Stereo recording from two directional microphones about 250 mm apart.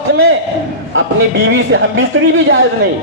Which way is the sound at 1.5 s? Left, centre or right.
Right.